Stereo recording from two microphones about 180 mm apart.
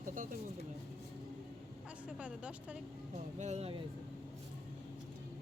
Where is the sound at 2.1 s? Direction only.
5° right (ahead or behind).